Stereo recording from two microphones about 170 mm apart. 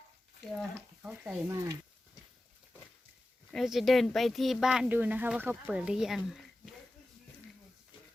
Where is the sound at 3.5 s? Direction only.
Centre (ahead or behind).